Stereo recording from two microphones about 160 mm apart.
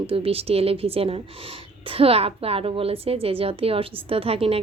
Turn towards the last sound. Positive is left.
turn(degrees=-40)  # may be behind; listen again after turning